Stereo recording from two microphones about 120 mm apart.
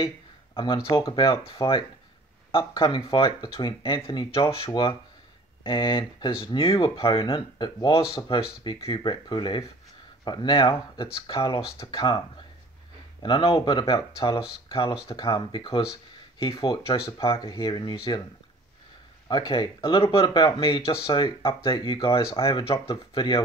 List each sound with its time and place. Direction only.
0.8 s speech: 35° left (ahead or behind)
8.3 s speech: 50° left (ahead or behind)
13.2 s speech: 45° left (ahead or behind)
19.2 s speech: 35° left (ahead or behind)